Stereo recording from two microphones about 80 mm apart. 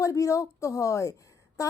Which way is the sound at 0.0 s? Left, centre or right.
Left.